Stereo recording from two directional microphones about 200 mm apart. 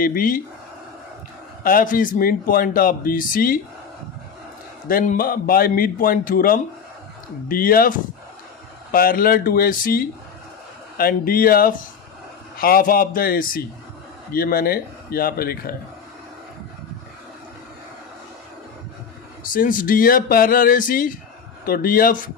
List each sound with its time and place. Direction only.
0.0 s speech: 45° left (ahead or behind)
1.6 s speech: 45° left (ahead or behind)
4.9 s speech: 45° left (ahead or behind)
19.4 s speech: 45° left (ahead or behind)